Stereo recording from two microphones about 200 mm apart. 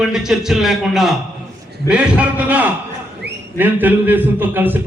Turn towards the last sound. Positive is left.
turn(degrees=-10)  # may be behind; listen again after turning